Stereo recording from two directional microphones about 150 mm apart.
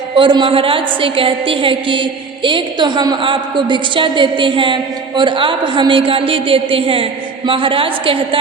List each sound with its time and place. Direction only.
0.2 s a woman's voice: 35° right (ahead or behind)